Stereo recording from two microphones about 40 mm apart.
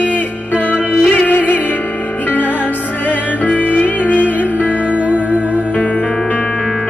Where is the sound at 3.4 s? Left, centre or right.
Left.